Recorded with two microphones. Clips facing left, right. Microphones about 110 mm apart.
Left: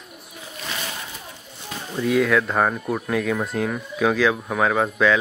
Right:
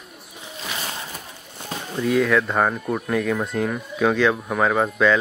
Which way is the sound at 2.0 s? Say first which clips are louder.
Even; centre (ahead or behind).